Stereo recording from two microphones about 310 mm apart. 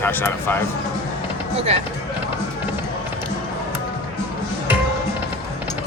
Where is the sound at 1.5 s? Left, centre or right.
Centre.